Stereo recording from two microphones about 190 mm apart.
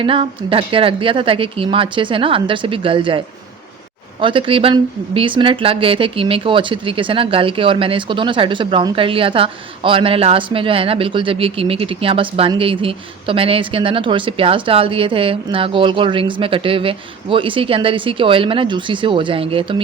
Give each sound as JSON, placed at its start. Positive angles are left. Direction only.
{"t": 0.0, "sound": "speech", "side_deg": -25}